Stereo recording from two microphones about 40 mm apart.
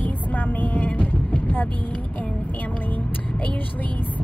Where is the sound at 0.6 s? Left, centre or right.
Left.